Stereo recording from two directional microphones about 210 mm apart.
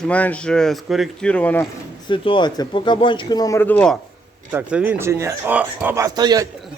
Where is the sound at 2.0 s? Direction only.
25° left (ahead or behind); by 4.0 s 5° left (ahead or behind).